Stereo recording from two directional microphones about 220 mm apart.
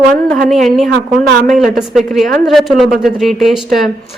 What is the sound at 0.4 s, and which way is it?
A woman's voice, centre (ahead or behind).